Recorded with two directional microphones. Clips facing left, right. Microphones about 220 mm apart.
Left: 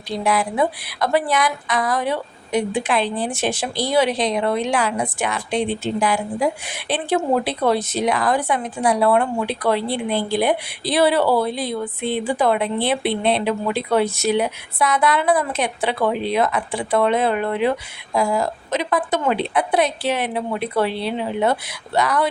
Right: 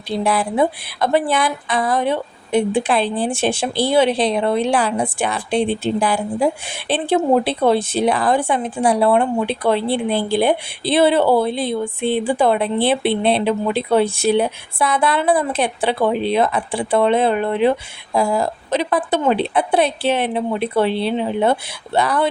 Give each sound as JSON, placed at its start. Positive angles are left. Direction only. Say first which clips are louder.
{"t": 0.1, "sound": "speech", "louder": "right 2 dB", "side_deg": -30}